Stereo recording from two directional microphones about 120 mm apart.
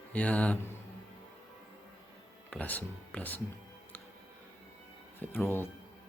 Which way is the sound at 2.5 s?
15° left (ahead or behind).